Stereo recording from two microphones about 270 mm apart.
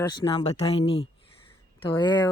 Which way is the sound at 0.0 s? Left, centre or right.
Centre.